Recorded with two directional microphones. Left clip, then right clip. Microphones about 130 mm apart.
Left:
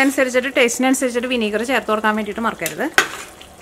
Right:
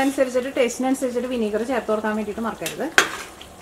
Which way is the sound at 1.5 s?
50° left (ahead or behind).